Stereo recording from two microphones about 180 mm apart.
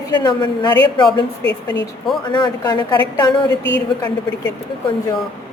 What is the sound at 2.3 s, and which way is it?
Speech, 25° left (ahead or behind).